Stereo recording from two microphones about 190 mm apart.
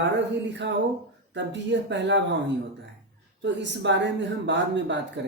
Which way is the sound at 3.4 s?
70° right (ahead or behind).